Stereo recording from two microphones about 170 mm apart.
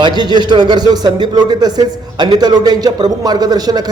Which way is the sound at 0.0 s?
25° right (ahead or behind).